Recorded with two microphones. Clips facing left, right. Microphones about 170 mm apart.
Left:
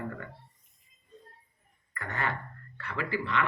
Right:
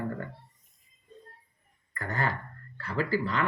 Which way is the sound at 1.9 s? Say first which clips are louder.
Right 2 dB; 35° right (ahead or behind).